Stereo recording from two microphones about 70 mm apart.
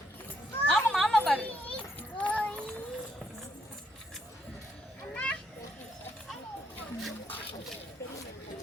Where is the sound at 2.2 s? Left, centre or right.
Centre.